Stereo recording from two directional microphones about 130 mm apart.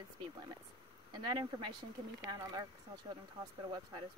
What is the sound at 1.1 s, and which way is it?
Speech, 35° right (ahead or behind).